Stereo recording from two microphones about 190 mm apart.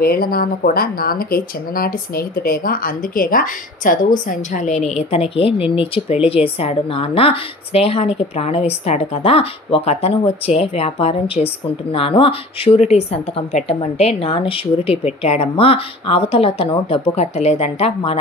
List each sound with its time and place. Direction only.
0.0 s speech: 50° left (ahead or behind); by 18.2 s 30° left (ahead or behind)